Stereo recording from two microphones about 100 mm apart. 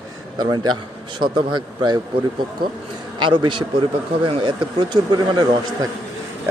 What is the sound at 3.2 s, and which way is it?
A man's voice, 55° right (ahead or behind).